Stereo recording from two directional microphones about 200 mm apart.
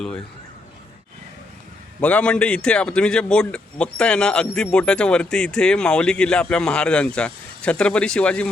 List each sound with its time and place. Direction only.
2.0 s a man's voice: 5° left (ahead or behind)